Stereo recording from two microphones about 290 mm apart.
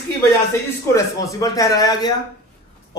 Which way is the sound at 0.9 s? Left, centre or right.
Centre.